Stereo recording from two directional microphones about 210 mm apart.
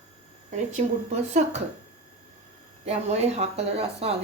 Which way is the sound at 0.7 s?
35° right (ahead or behind).